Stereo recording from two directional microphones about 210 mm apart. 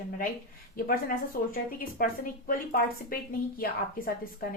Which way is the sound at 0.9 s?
40° left (ahead or behind).